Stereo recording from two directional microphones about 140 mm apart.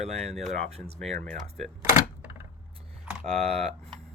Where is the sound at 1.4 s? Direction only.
Centre (ahead or behind).